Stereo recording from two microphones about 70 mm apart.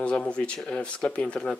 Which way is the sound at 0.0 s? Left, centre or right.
Centre.